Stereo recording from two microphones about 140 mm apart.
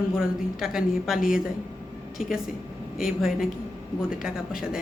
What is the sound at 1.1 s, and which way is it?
Speech, 80° left.